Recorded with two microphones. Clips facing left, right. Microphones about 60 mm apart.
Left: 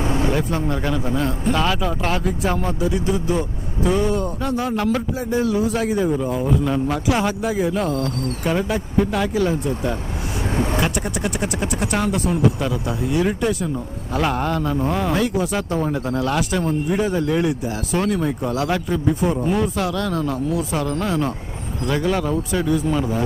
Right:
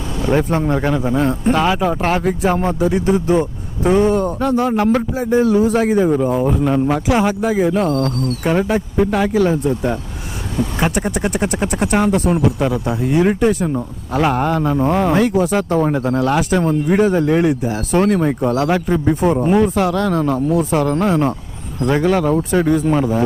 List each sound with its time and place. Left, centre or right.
0.3 s a man's voice: right; by 9.3 s centre
9.5 s speech: right
14.1 s a man's voice: centre
20.5 s speech: right